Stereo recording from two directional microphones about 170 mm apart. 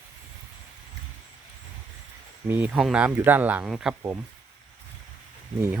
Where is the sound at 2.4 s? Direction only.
10° right (ahead or behind).